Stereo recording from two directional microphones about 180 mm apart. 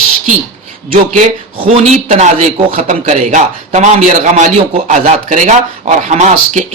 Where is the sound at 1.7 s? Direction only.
40° right (ahead or behind).